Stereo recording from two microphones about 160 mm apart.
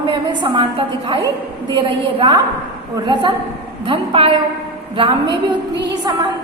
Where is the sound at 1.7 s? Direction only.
30° right (ahead or behind).